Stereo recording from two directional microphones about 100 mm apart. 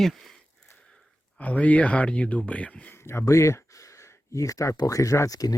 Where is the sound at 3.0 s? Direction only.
30° left (ahead or behind).